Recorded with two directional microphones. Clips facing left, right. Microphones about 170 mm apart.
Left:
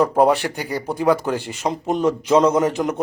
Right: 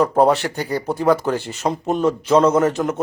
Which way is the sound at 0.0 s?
10° left (ahead or behind).